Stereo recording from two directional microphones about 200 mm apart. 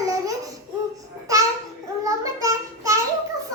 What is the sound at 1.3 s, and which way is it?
Babbling, 15° right (ahead or behind).